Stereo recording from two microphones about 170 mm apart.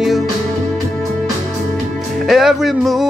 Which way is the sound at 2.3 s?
Centre (ahead or behind).